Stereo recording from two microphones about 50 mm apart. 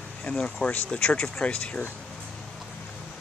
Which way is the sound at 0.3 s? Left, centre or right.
Centre.